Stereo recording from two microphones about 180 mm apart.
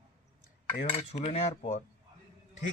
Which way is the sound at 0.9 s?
35° left (ahead or behind).